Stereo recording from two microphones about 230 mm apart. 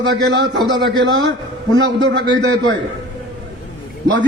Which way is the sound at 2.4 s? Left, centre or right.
Right.